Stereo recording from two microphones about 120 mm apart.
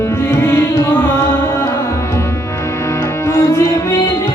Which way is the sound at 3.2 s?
25° left (ahead or behind).